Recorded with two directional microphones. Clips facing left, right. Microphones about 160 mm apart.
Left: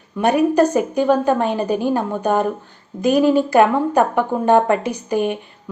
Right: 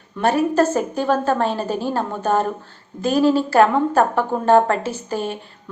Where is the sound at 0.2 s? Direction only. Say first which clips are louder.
Left 2 dB; 15° left (ahead or behind).